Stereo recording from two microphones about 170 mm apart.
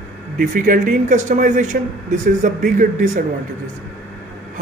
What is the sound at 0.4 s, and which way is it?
Speech, 50° right (ahead or behind).